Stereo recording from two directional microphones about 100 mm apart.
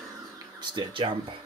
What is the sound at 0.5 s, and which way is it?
Speech, 55° right (ahead or behind).